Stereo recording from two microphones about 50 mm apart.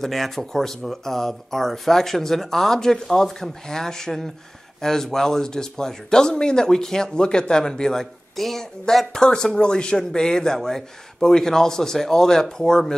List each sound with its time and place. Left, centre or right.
0.0 s speech: centre